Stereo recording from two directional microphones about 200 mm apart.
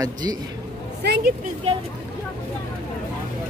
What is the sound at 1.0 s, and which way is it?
Speech, 55° right (ahead or behind).